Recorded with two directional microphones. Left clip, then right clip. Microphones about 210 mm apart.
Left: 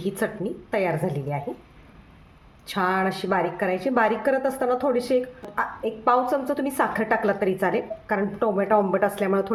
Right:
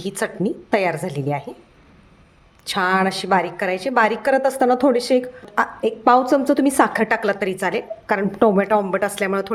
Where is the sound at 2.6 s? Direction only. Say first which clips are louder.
Right 5 dB; 45° right (ahead or behind).